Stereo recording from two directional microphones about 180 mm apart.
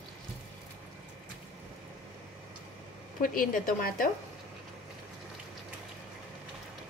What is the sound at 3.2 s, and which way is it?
Speech, 50° left (ahead or behind).